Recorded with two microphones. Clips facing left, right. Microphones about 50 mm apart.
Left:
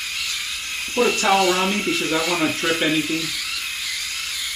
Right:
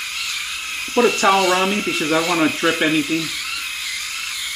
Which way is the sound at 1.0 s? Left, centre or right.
Centre.